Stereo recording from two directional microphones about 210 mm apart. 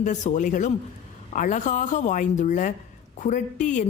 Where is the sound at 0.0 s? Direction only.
35° left (ahead or behind).